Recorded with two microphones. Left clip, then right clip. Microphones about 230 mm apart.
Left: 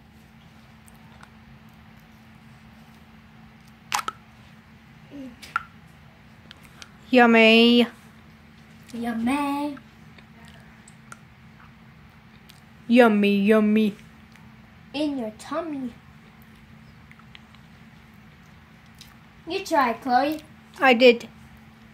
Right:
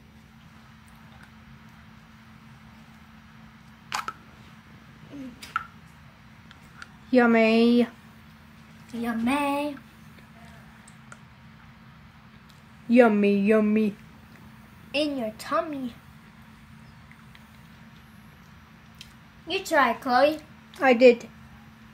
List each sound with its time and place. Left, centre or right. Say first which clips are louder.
3.9 s a sound: left 4 dB; centre
7.1 s speech: left 5 dB; centre
9.0 s a woman's voice: even; centre
12.9 s speech: left 1 dB; centre
15.0 s a woman's voice: right 1 dB; centre
19.4 s a woman's voice: even; centre
20.8 s speech: left 1 dB; centre